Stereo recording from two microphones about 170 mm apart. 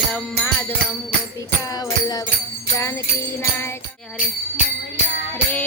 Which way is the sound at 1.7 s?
20° left (ahead or behind).